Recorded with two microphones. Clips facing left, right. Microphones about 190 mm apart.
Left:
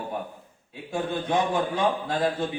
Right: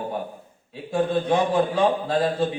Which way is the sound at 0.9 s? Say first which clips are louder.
Right 5 dB; 30° right (ahead or behind).